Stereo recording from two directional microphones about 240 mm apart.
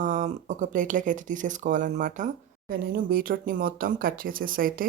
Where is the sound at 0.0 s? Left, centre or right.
Right.